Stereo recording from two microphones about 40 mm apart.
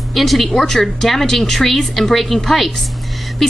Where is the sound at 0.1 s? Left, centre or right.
Centre.